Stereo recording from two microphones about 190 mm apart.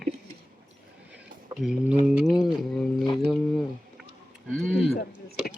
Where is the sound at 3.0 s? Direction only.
25° left (ahead or behind).